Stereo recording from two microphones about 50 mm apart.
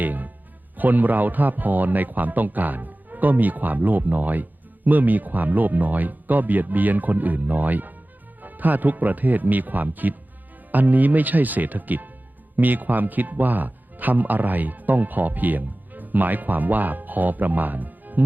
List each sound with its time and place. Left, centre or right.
0.0 s music: right
0.8 s a man's voice: right